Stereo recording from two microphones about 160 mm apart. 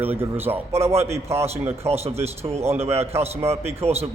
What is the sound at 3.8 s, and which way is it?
Speech, 40° right (ahead or behind).